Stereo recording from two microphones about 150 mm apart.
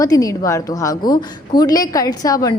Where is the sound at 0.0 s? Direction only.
25° left (ahead or behind).